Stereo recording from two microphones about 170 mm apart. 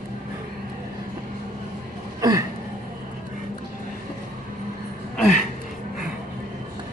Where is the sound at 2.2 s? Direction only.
20° right (ahead or behind).